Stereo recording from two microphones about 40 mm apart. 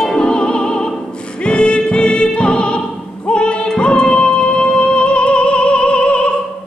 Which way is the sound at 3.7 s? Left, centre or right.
Left.